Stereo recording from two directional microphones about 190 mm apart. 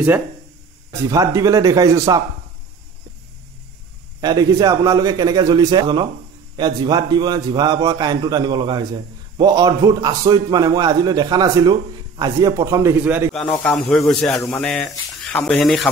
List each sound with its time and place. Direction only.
1.1 s speech: 15° right (ahead or behind)
4.2 s a man's voice: 20° right (ahead or behind)
13.3 s speech: 5° left (ahead or behind)